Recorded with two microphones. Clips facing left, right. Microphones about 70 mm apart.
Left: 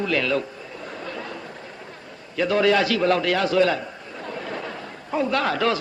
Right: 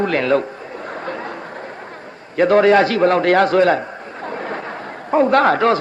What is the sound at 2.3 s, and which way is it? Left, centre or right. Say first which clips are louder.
A man's voice: right 7 dB; right.